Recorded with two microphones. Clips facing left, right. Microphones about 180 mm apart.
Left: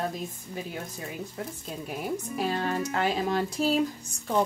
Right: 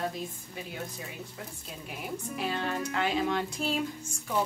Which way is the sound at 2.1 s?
40° left (ahead or behind).